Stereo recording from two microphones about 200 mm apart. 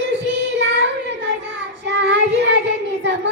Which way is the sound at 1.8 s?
60° right (ahead or behind).